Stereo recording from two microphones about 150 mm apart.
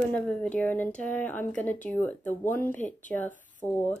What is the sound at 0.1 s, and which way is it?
Speech, 10° left (ahead or behind).